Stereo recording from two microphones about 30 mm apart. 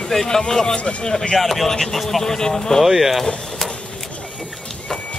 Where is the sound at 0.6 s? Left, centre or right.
Left.